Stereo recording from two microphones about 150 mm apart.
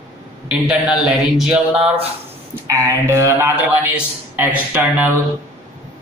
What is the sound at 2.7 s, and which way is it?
Speech, 20° right (ahead or behind).